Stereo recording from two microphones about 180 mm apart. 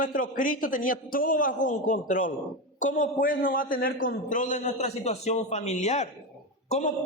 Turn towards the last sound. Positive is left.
turn(degrees=45)  # may be behind; listen again after turning